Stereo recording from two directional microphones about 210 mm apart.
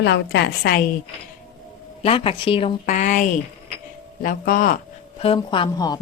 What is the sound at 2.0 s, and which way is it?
A woman's voice, 25° left (ahead or behind).